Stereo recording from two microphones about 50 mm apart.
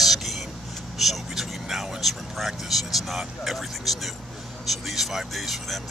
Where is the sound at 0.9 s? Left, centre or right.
Centre.